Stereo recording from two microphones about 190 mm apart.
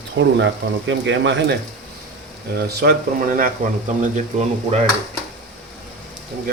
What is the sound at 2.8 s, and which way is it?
Speech, 50° right (ahead or behind).